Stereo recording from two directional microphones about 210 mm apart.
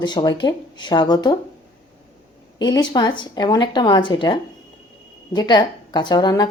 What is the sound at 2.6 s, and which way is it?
Speech, 20° left (ahead or behind).